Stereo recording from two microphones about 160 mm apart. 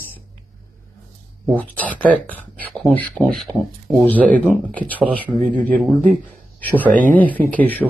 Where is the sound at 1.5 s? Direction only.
10° left (ahead or behind).